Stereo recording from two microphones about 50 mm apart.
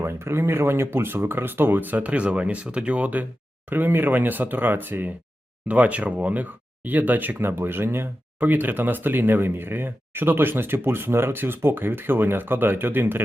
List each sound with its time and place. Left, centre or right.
0.0 s speech: right
3.7 s speech: right
5.6 s speech: right